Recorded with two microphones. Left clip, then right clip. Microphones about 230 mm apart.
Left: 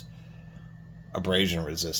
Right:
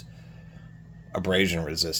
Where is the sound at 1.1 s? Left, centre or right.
Right.